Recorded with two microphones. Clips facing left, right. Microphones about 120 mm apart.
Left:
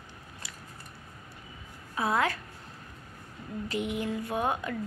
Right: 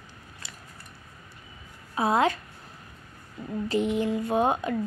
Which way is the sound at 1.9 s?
20° right (ahead or behind).